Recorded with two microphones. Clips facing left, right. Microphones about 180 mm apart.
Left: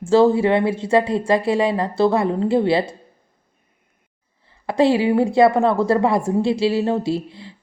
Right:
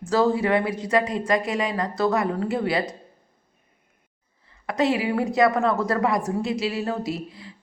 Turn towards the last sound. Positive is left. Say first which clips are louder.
# left 7 dB
turn(degrees=30)  # may be behind; listen again after turning